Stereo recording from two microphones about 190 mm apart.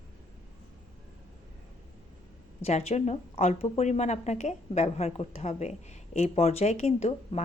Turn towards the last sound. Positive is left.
turn(degrees=35)  # may be behind; listen again after turning